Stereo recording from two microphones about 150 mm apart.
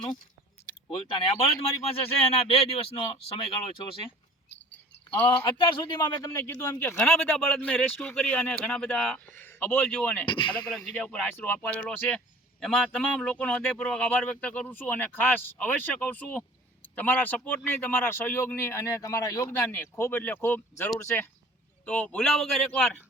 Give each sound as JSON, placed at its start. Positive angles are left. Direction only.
{"t": 0.9, "sound": "speech", "side_deg": 35}
{"t": 5.5, "sound": "speech", "side_deg": 35}
{"t": 6.0, "sound": "speech", "side_deg": 15}
{"t": 10.2, "sound": "speech", "side_deg": 35}
{"t": 10.7, "sound": "speech", "side_deg": 5}